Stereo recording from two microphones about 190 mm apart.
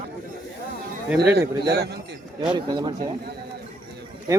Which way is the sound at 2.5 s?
20° right (ahead or behind).